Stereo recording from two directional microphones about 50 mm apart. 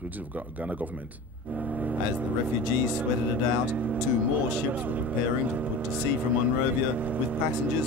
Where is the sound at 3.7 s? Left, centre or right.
Right.